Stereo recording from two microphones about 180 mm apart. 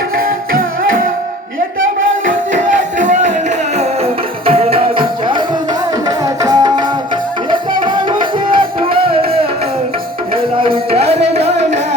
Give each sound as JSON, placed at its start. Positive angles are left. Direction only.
{"t": 3.0, "sound": "music", "side_deg": -45}
{"t": 10.6, "sound": "music", "side_deg": -30}